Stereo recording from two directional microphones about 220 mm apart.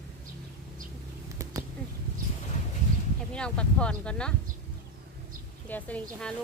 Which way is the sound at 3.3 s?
5° left (ahead or behind).